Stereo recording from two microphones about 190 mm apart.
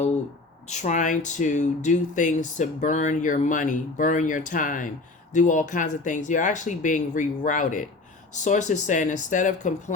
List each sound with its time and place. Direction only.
0.7 s speech: 40° left (ahead or behind)